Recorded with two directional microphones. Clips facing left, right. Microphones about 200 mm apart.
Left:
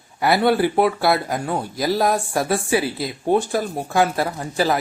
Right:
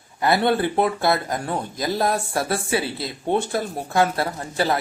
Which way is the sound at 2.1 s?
20° left (ahead or behind).